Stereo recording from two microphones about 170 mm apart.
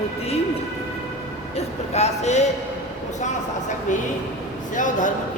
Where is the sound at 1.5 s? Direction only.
40° left (ahead or behind).